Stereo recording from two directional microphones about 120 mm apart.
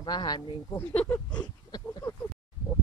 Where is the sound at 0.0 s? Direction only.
35° left (ahead or behind).